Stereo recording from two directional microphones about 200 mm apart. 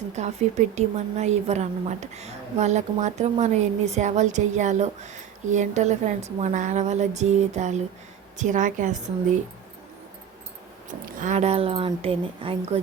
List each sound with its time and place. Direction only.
0.2 s a woman's voice: 35° right (ahead or behind)
10.8 s speech: 40° right (ahead or behind)